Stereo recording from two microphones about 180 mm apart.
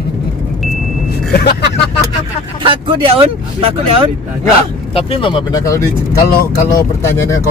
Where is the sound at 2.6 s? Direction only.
30° right (ahead or behind).